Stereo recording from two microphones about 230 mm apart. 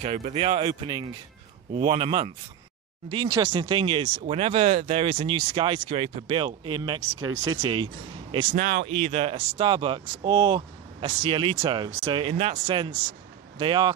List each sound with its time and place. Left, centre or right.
0.0 s speech: right
8.5 s speech: right; by 13.9 s centre